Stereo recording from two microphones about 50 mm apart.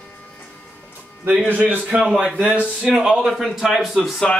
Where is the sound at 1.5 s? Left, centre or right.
Right.